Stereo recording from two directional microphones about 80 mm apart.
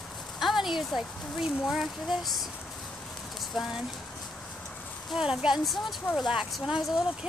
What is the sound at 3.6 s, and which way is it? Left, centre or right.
Speech, centre.